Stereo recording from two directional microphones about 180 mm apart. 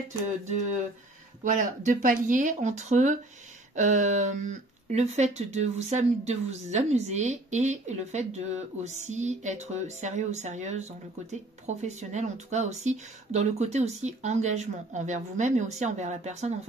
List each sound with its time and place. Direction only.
1.4 s speech: 45° right (ahead or behind)